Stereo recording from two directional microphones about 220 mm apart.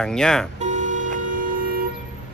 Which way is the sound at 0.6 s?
35° right (ahead or behind).